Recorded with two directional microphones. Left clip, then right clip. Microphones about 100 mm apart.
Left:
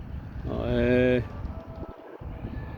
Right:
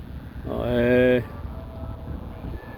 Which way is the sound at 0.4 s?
20° left (ahead or behind).